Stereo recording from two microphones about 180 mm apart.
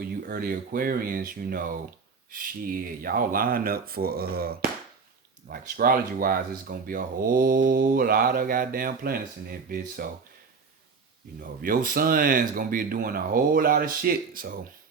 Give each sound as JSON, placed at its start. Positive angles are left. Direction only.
{"t": 0.0, "sound": "speech", "side_deg": -55}
{"t": 11.3, "sound": "speech", "side_deg": -50}